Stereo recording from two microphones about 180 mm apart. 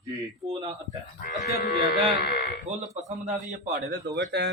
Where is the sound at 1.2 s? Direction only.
50° left (ahead or behind).